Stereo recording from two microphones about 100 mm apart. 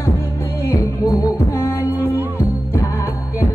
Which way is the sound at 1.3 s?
25° left (ahead or behind).